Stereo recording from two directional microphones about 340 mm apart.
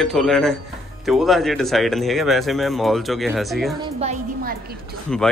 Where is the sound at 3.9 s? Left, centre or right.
Centre.